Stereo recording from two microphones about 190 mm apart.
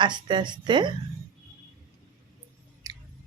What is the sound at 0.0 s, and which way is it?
Speech, 25° right (ahead or behind).